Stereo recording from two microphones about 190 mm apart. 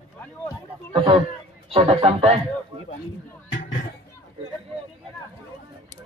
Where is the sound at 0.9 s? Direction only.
25° right (ahead or behind).